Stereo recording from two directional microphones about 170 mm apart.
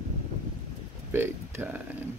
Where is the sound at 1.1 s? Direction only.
15° right (ahead or behind).